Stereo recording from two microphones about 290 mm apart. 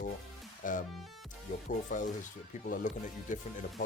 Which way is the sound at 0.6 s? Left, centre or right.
Left.